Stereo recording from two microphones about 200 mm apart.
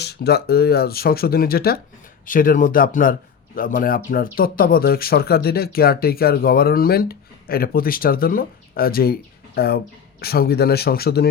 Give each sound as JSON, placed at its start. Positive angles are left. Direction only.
{"t": 0.0, "sound": "a man's voice", "side_deg": 55}